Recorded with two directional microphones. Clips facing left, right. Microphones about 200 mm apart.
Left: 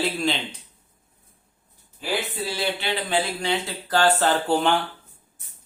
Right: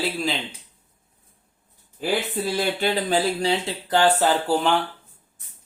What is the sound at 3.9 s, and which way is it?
Speech, 15° right (ahead or behind).